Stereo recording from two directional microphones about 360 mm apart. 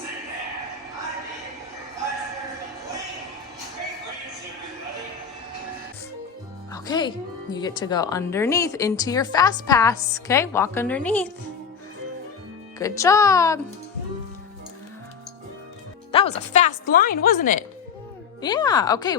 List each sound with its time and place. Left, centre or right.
6.7 s music: centre
7.5 s speech: centre
12.8 s speech: centre
16.1 s speech: centre
18.4 s speech: centre